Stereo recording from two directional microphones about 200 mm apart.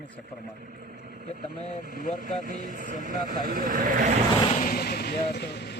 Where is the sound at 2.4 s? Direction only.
45° right (ahead or behind).